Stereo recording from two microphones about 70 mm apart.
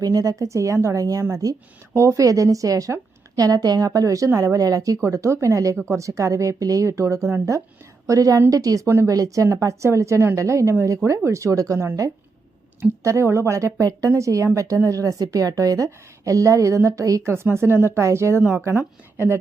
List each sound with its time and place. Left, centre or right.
0.0 s a woman's voice: right
13.0 s a woman's voice: right